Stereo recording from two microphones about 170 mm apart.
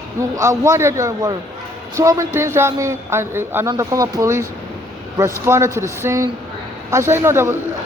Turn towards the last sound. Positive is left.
turn(degrees=-15)  # may be behind; listen again after turning